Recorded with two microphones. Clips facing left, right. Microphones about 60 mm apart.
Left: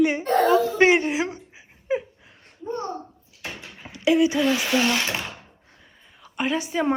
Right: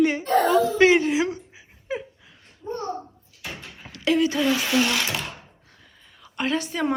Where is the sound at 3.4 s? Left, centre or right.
Centre.